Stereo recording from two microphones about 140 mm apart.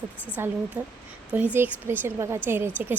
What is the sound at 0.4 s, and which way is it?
Speech, 15° right (ahead or behind).